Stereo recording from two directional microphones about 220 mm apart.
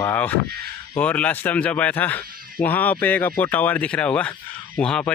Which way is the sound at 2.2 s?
40° right (ahead or behind).